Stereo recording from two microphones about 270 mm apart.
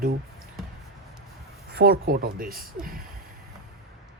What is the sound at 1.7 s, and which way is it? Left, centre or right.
Speech, right.